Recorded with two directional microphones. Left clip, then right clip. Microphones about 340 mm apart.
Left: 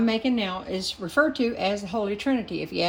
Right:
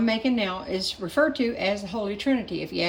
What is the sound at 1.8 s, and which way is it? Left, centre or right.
Speech, centre.